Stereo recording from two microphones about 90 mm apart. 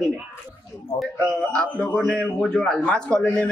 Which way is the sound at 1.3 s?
10° left (ahead or behind).